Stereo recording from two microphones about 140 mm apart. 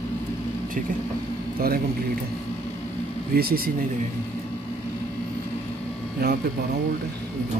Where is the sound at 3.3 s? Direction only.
90° right.